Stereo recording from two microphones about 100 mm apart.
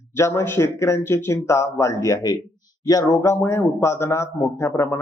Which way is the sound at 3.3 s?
20° left (ahead or behind).